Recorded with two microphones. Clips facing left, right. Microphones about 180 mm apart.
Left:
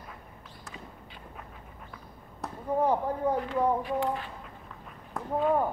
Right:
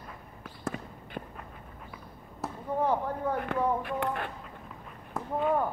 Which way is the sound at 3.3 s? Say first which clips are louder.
Even; 60° right (ahead or behind).